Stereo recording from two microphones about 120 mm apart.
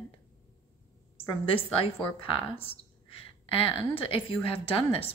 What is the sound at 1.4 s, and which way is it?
Speech, 50° left (ahead or behind).